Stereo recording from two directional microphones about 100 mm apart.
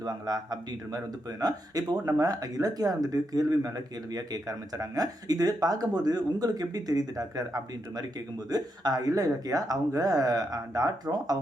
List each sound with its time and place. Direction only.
0.0 s speech: 40° right (ahead or behind)